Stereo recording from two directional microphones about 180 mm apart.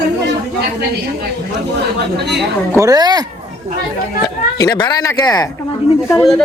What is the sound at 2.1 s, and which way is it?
Speech, 70° right (ahead or behind).